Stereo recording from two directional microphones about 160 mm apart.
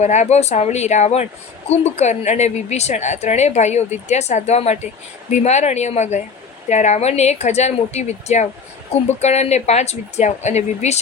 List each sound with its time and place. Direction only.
0.0 s a woman's voice: 45° left (ahead or behind)